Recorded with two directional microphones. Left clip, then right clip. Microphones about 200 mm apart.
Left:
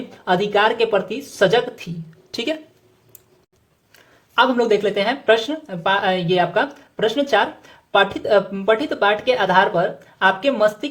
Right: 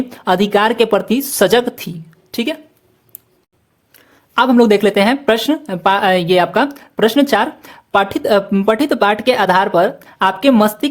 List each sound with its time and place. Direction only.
0.1 s speech: 40° right (ahead or behind)
2.3 s speech: 25° right (ahead or behind)
4.4 s speech: 40° right (ahead or behind)